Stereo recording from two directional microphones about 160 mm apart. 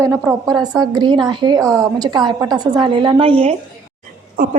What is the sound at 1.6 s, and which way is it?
Speech, 5° left (ahead or behind).